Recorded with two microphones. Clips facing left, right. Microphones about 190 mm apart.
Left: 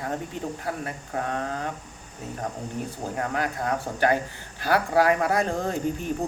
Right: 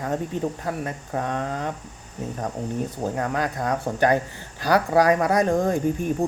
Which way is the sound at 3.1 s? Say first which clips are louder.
Even; 25° right (ahead or behind).